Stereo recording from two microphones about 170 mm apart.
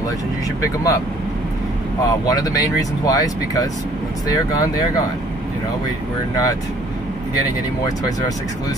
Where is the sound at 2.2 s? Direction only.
20° left (ahead or behind).